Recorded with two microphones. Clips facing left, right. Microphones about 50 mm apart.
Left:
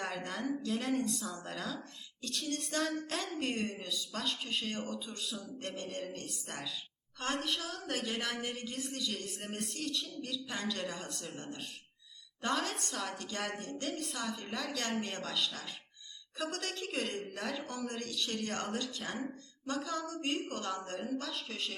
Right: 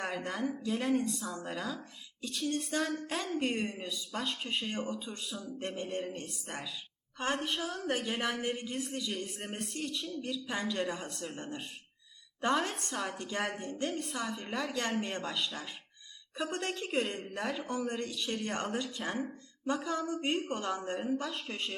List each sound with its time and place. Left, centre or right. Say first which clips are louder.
0.0 s a woman's voice: right 3 dB; centre
4.7 s speech: right 3 dB; centre
5.1 s speech: even; centre
5.5 s speech: right 6 dB; centre
8.9 s speech: right 1 dB; centre
9.1 s speech: right 2 dB; centre
11.3 s speech: right 3 dB; centre
13.0 s speech: right 5 dB; centre
17.7 s speech: right 5 dB; centre
21.2 s speech: right 2 dB; centre